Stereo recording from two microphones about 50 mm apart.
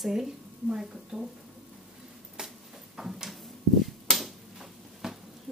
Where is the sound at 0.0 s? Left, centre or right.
Centre.